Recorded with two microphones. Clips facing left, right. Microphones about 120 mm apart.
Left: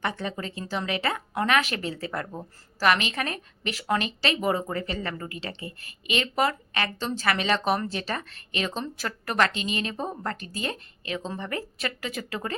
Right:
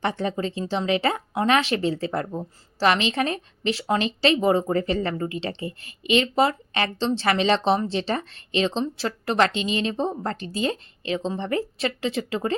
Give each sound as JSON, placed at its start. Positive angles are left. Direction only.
{"t": 0.0, "sound": "a woman's voice", "side_deg": -30}